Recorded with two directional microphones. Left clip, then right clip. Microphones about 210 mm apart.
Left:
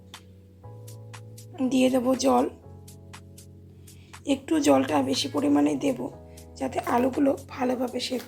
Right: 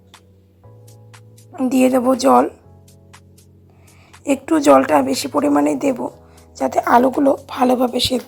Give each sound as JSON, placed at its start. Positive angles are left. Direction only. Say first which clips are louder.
{"t": 1.5, "sound": "a woman's voice", "louder": "right 8 dB", "side_deg": -25}
{"t": 4.3, "sound": "a woman's voice", "louder": "right 10 dB", "side_deg": -25}
{"t": 6.5, "sound": "a sound", "louder": "right 11 dB", "side_deg": -25}
{"t": 6.8, "sound": "a woman's voice", "louder": "right 10 dB", "side_deg": -30}